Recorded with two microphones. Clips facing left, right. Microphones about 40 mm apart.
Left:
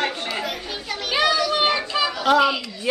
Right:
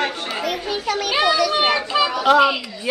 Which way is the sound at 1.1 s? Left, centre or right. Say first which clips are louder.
Right 1 dB; centre.